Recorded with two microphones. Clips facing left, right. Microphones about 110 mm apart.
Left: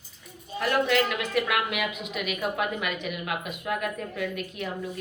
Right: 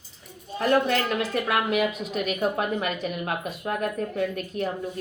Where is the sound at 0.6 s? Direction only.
35° right (ahead or behind).